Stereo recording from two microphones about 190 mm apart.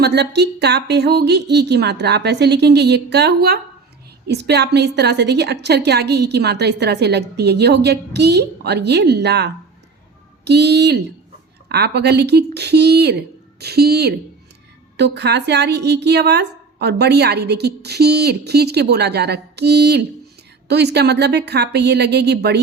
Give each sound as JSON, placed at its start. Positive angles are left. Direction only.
{"t": 0.0, "sound": "a woman's voice", "side_deg": -60}